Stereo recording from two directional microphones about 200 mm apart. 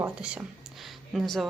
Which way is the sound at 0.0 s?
5° right (ahead or behind).